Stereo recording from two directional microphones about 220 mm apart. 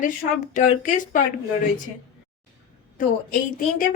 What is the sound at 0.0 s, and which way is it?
A woman's voice, 35° left (ahead or behind).